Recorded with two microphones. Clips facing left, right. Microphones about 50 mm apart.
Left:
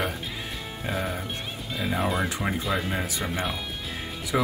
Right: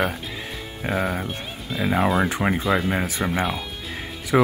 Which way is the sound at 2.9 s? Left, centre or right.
Right.